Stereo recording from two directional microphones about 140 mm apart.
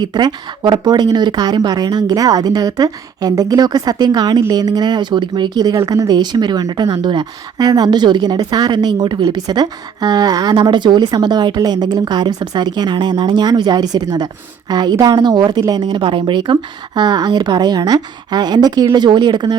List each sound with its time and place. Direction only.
0.0 s a woman's voice: 30° right (ahead or behind)